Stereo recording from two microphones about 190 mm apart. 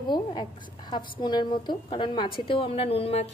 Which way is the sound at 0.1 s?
25° left (ahead or behind).